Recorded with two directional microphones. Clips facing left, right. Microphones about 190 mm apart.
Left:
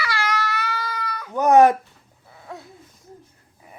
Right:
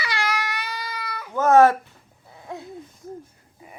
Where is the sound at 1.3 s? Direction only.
15° left (ahead or behind).